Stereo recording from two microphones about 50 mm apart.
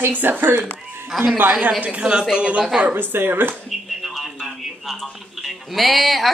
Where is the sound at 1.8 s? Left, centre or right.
Right.